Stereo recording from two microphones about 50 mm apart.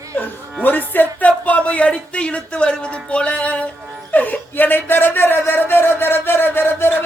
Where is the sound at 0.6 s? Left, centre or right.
Left.